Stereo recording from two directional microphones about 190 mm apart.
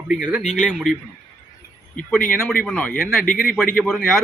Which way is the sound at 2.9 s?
50° left (ahead or behind).